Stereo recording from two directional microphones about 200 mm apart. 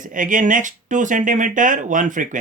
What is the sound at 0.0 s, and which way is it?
Speech, 40° right (ahead or behind).